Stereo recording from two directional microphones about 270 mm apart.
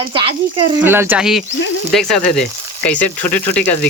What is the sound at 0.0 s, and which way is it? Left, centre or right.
Speech, centre.